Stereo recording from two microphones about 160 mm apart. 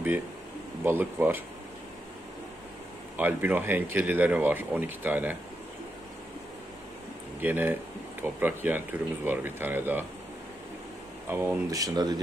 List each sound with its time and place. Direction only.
0.8 s speech: 10° right (ahead or behind)
3.2 s speech: 10° right (ahead or behind)
7.4 s speech: 10° right (ahead or behind)
11.2 s speech: 15° right (ahead or behind)